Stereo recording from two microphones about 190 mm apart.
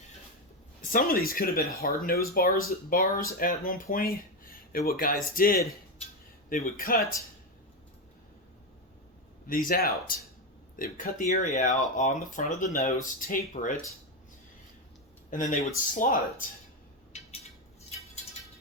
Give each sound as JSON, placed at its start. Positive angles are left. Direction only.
{"t": 0.8, "sound": "speech", "side_deg": 50}
{"t": 9.5, "sound": "speech", "side_deg": 50}
{"t": 15.3, "sound": "speech", "side_deg": 40}
{"t": 17.1, "sound": "a sound", "side_deg": 35}